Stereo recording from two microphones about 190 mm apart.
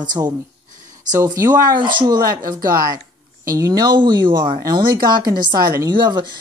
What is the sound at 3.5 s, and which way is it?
Speech, 20° right (ahead or behind).